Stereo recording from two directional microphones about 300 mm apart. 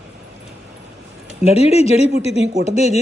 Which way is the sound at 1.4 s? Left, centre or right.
Centre.